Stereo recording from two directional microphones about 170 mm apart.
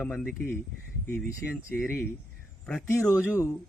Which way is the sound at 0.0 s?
5° left (ahead or behind).